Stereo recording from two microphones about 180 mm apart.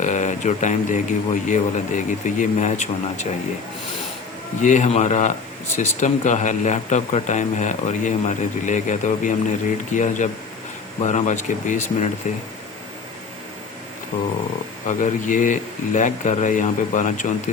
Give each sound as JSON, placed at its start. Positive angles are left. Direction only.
{"t": 0.0, "sound": "speech", "side_deg": 40}
{"t": 4.6, "sound": "speech", "side_deg": 40}
{"t": 14.8, "sound": "speech", "side_deg": 45}